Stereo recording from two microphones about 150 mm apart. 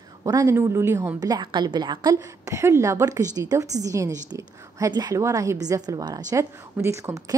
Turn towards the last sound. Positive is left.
turn(degrees=-20)  # may be behind; listen again after turning